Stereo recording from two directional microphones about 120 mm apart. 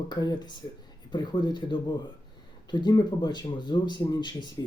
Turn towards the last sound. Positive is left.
turn(degrees=40)  # may be behind; listen again after turning